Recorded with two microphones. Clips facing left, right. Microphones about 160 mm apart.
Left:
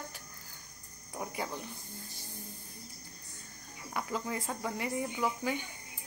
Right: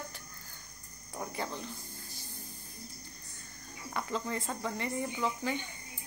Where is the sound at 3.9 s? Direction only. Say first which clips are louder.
Even; 5° left (ahead or behind).